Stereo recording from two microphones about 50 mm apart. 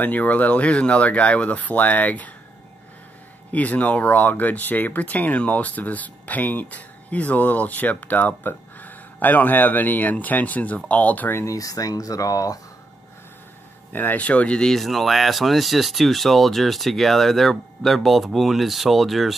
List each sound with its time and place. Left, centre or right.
0.0 s speech: left
3.5 s speech: left
13.9 s speech: left
14.2 s speech: left
14.6 s speech: centre